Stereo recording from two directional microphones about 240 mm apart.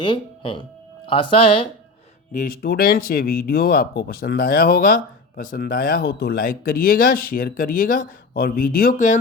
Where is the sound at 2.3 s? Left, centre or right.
Left.